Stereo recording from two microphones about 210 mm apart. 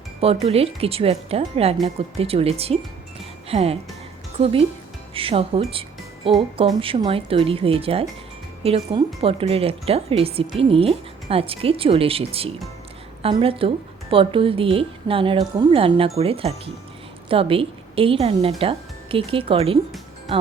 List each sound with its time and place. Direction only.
0.2 s a woman's voice: 30° right (ahead or behind)